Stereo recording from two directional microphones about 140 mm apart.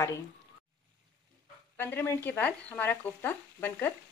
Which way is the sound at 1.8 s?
15° left (ahead or behind).